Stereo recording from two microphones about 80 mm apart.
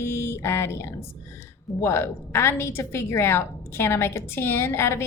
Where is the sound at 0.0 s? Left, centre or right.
Left.